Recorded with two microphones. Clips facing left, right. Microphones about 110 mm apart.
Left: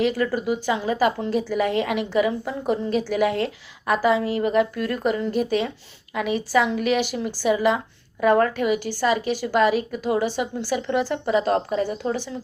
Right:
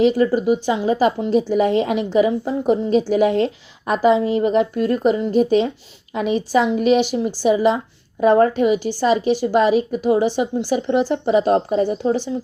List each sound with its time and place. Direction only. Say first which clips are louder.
0.0 s a woman's voice: right 7 dB; 20° right (ahead or behind)